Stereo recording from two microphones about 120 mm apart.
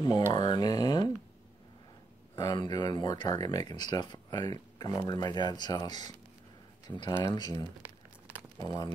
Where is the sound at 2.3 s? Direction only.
35° left (ahead or behind).